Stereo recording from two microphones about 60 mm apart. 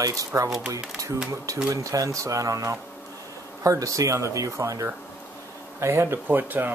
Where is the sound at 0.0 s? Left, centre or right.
Right.